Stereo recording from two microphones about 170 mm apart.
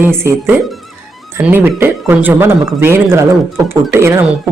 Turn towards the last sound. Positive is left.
turn(degrees=-15)  # may be behind; listen again after turning